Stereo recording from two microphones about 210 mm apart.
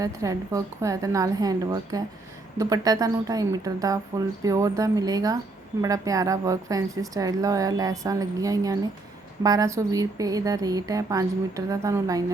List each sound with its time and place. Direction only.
0.0 s a woman's voice: 15° right (ahead or behind)